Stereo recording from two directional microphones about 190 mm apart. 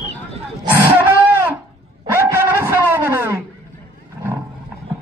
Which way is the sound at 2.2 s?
10° right (ahead or behind).